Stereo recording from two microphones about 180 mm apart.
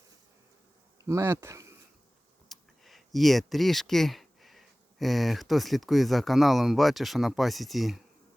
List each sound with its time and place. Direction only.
1.0 s speech: 15° right (ahead or behind)
2.5 s speech: centre (ahead or behind)